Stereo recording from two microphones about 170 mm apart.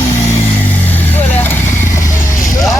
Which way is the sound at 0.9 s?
10° left (ahead or behind).